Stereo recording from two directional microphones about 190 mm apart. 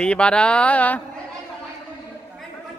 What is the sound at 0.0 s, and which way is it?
Speech, 5° left (ahead or behind).